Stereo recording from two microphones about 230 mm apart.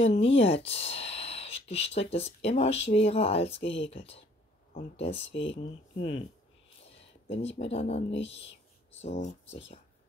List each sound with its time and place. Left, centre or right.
0.0 s speech: left
5.3 s speech: left
7.2 s speech: left
8.2 s speech: left
9.0 s speech: left